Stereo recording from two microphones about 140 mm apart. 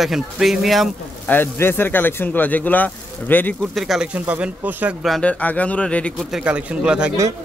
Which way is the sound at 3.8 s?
5° right (ahead or behind).